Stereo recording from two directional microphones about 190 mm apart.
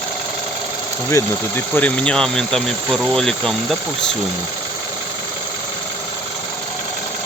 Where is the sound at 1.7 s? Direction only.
5° left (ahead or behind).